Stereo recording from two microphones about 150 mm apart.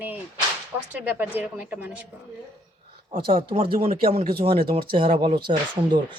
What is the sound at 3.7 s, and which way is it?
Speech, 75° right (ahead or behind).